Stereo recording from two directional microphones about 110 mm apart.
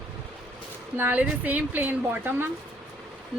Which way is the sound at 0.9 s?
15° right (ahead or behind).